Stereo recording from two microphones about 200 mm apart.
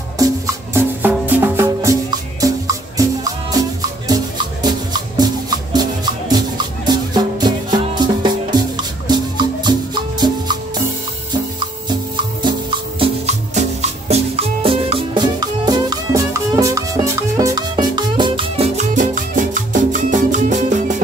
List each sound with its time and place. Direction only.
0.7 s music: 10° right (ahead or behind)
4.1 s music: 20° right (ahead or behind)
13.0 s music: 35° right (ahead or behind)
18.9 s music: 40° right (ahead or behind)